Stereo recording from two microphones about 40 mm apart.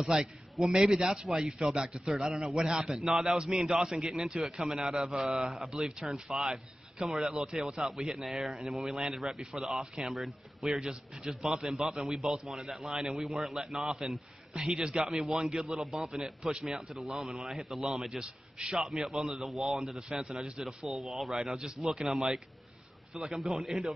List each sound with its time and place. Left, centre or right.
0.0 s a man's voice: centre
1.6 s a man's voice: centre
4.4 s a man's voice: centre
5.3 s a man's voice: centre
15.0 s a man's voice: centre
18.2 s a man's voice: right
19.0 s a man's voice: centre